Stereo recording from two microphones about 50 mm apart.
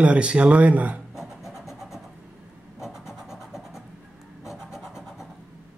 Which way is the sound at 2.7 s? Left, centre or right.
Centre.